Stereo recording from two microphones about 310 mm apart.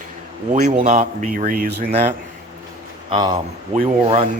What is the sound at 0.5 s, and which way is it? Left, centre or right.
Speech, right.